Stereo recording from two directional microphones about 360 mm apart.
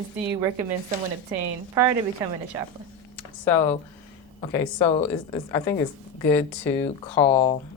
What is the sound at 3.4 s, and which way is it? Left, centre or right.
Speech, centre.